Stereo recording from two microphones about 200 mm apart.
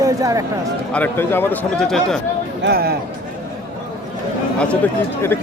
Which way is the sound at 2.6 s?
50° right (ahead or behind).